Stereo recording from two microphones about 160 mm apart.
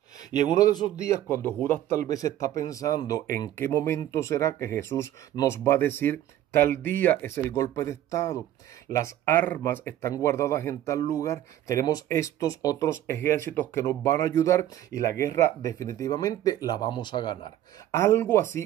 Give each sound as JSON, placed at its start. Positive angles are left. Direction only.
{"t": 0.3, "sound": "speech", "side_deg": 25}
{"t": 17.9, "sound": "speech", "side_deg": 15}